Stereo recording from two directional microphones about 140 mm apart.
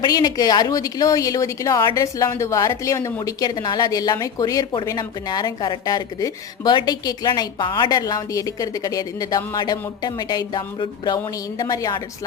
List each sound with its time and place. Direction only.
0.0 s a woman's voice: 30° left (ahead or behind)